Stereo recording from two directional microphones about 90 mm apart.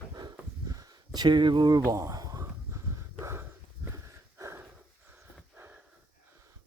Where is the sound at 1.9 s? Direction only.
40° right (ahead or behind).